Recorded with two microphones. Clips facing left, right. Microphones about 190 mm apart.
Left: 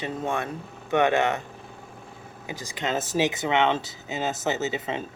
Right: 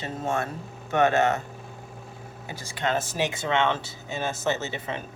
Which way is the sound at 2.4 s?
15° left (ahead or behind).